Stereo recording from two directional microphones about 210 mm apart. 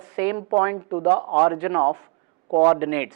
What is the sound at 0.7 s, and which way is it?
A woman's voice, 20° right (ahead or behind).